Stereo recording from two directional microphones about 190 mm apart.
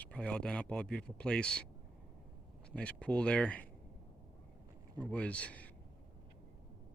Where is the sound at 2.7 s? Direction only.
5° left (ahead or behind).